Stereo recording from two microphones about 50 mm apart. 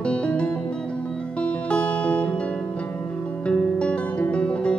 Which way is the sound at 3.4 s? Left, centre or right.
Left.